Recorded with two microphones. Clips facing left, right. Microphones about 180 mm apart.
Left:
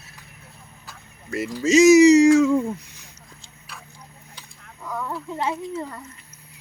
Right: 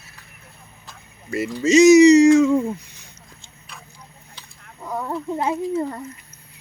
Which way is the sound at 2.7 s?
Centre (ahead or behind).